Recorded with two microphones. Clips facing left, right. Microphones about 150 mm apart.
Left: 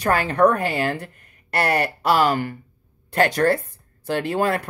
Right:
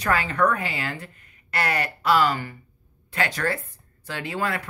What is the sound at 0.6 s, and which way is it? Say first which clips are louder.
Speech: left 8 dB; 55° left (ahead or behind).